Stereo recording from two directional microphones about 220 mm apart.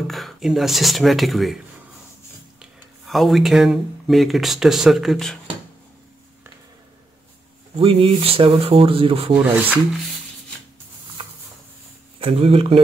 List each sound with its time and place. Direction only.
0.0 s speech: centre (ahead or behind)
3.1 s speech: centre (ahead or behind)
7.8 s speech: 25° right (ahead or behind)
12.2 s speech: 25° right (ahead or behind)